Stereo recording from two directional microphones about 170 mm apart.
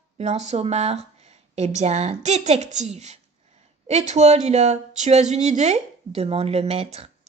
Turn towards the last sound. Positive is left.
turn(degrees=-35)  # may be behind; listen again after turning